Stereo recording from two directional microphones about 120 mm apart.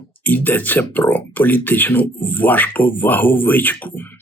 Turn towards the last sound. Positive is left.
turn(degrees=15)  # may be behind; listen again after turning